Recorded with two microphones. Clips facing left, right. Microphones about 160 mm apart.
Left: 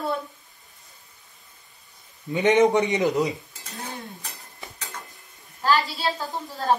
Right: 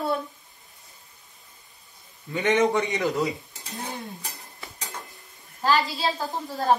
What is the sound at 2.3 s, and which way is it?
Speech, 20° left (ahead or behind).